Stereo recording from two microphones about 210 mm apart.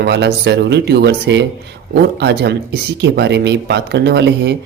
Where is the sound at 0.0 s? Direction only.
50° right (ahead or behind).